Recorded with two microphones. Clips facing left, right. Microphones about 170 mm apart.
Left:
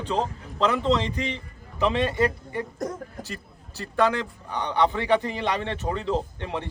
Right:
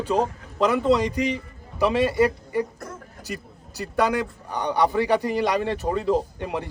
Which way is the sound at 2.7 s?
40° left (ahead or behind).